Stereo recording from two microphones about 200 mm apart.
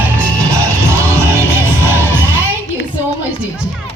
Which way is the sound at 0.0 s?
15° right (ahead or behind).